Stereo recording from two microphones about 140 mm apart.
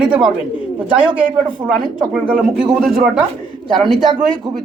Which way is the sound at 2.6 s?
Centre (ahead or behind).